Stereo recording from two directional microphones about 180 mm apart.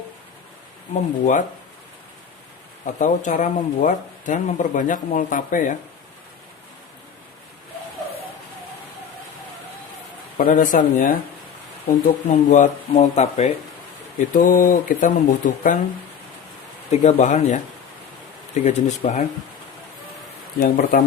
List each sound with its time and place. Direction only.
2.8 s speech: 45° left (ahead or behind)
10.3 s speech: 45° left (ahead or behind)
16.9 s speech: 40° left (ahead or behind)
18.6 s speech: 40° left (ahead or behind)
20.6 s speech: 50° left (ahead or behind)